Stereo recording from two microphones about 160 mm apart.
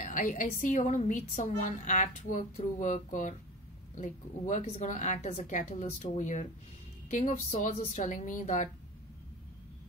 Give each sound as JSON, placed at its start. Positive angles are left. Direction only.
{"t": 0.0, "sound": "a woman's voice", "side_deg": 55}